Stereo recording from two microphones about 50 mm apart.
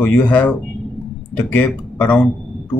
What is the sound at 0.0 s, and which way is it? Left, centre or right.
A man's voice, left.